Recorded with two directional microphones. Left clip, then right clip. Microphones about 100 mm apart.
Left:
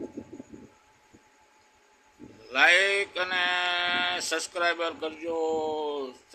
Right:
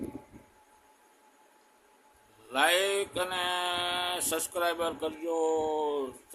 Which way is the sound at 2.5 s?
15° right (ahead or behind).